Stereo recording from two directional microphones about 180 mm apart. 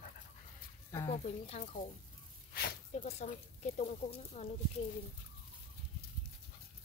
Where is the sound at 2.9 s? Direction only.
40° left (ahead or behind).